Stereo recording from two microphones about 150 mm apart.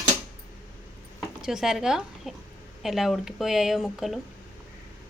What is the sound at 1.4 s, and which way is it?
Speech, 5° right (ahead or behind).